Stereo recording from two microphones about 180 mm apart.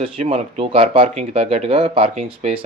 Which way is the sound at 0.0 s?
30° right (ahead or behind).